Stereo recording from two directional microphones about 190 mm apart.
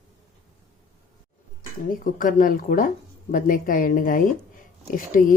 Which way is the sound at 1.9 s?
45° left (ahead or behind).